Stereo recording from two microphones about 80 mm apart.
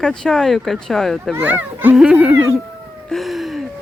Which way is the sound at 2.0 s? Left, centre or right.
Centre.